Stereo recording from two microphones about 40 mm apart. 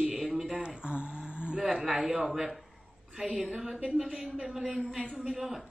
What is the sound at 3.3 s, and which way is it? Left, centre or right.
A woman's voice, right.